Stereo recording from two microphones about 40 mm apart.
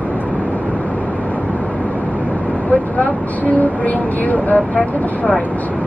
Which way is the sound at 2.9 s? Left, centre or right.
Left.